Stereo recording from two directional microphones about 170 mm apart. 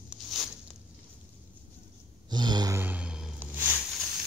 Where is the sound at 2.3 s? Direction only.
25° right (ahead or behind).